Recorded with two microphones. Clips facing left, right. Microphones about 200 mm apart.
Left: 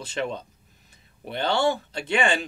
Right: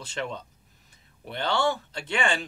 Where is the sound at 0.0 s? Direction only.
15° left (ahead or behind).